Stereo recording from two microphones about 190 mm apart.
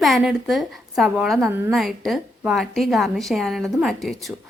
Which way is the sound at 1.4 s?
15° right (ahead or behind).